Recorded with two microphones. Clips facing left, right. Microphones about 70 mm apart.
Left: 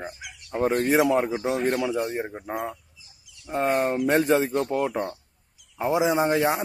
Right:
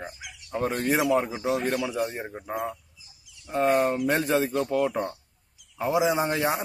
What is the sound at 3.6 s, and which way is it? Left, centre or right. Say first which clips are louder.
Speech: right 1 dB; left.